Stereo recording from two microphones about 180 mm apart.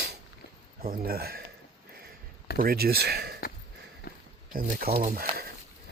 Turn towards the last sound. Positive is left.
turn(degrees=-55)  # may be behind; listen again after turning